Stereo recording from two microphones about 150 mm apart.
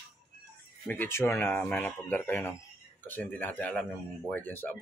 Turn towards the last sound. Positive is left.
turn(degrees=10)  # may be behind; listen again after turning